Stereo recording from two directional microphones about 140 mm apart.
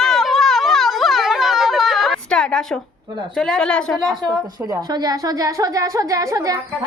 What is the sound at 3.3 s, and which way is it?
Speech, 5° left (ahead or behind).